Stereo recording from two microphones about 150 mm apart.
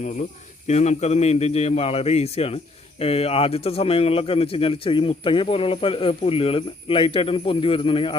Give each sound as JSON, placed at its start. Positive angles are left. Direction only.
{"t": 0.7, "sound": "a man's voice", "side_deg": 50}